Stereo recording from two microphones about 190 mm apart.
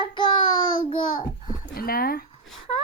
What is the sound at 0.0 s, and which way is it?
Child singing, 25° left (ahead or behind).